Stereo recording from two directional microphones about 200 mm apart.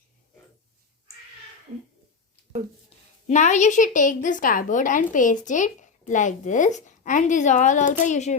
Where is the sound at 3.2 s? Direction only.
35° left (ahead or behind).